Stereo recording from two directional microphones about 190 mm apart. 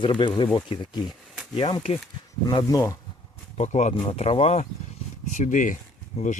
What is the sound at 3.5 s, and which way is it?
Speech, 35° left (ahead or behind).